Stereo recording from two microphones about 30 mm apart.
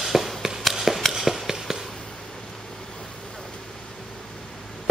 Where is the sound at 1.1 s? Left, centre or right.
Centre.